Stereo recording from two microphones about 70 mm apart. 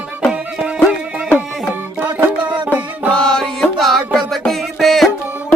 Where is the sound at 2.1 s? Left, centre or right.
Right.